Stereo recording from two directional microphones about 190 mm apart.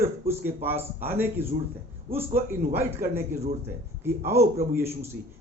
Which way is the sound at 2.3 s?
50° right (ahead or behind).